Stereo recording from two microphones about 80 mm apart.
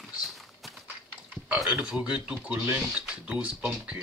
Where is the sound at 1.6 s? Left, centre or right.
Centre.